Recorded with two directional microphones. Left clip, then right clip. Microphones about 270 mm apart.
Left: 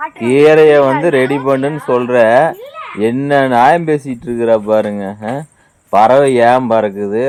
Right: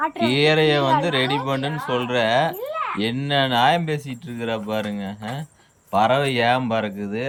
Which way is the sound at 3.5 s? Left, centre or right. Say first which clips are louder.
Left 10 dB; left.